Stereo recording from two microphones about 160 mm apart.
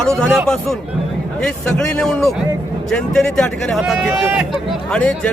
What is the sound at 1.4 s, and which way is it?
A man's voice, 5° left (ahead or behind).